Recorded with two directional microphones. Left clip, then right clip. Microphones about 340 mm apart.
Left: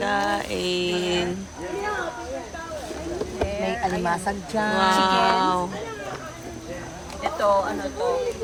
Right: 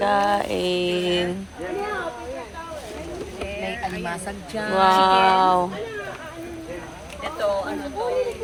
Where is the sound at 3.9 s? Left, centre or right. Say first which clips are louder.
Left 5 dB; left.